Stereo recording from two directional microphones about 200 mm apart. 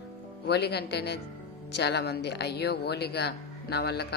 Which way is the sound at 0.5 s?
55° left (ahead or behind).